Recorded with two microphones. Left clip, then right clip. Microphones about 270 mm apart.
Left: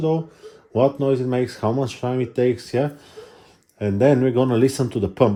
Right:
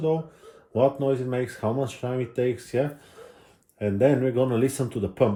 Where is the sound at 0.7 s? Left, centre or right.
Left.